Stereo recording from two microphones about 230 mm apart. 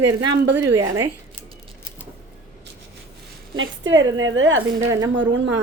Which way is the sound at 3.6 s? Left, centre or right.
Right.